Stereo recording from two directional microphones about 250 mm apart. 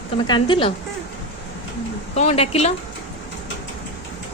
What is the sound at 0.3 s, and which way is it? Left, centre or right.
Speech, centre.